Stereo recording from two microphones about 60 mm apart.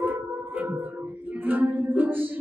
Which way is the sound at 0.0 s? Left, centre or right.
Right.